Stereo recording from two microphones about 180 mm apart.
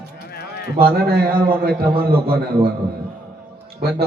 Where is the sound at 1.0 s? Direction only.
55° right (ahead or behind).